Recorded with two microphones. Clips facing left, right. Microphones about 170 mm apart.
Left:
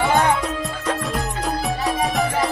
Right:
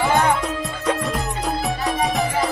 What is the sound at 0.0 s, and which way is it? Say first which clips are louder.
Music: even; centre (ahead or behind).